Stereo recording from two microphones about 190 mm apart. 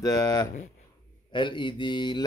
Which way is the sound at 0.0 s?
20° left (ahead or behind).